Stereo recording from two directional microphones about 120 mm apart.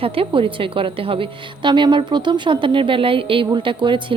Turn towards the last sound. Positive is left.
turn(degrees=-40)  # may be behind; listen again after turning